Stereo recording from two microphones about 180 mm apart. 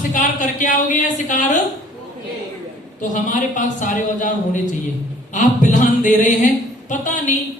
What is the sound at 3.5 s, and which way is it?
Speech, 45° left (ahead or behind).